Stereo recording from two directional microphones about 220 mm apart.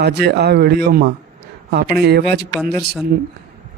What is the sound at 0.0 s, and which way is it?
Speech, 45° right (ahead or behind).